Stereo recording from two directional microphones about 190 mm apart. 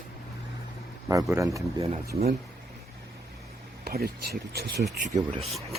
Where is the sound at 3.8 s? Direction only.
55° right (ahead or behind).